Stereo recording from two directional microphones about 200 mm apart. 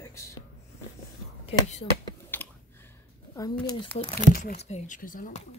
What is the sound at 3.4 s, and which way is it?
Speech, 20° left (ahead or behind).